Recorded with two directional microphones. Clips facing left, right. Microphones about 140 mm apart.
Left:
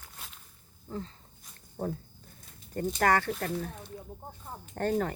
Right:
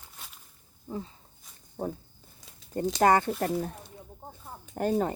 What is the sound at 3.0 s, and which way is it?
Speech, 20° right (ahead or behind).